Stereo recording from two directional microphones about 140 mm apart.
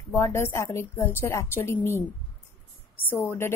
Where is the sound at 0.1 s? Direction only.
20° left (ahead or behind).